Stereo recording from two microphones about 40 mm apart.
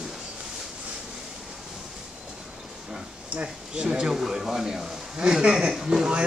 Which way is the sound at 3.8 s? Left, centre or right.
Centre.